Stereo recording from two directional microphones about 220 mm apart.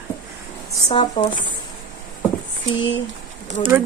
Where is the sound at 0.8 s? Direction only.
25° left (ahead or behind).